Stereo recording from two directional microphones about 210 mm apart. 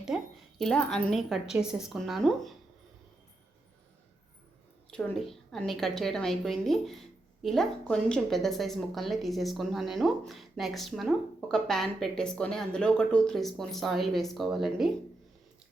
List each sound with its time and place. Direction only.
0.1 s a sound: 5° right (ahead or behind)
0.6 s a woman's voice: 5° left (ahead or behind)
4.9 s a woman's voice: centre (ahead or behind)